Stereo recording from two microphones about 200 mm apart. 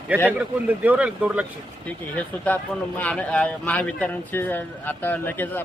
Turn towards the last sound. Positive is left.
turn(degrees=10)  # may be behind; listen again after turning